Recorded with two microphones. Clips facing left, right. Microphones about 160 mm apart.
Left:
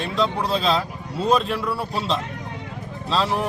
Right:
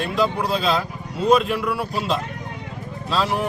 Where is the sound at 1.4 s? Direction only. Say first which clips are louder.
Right 2 dB; 30° left (ahead or behind).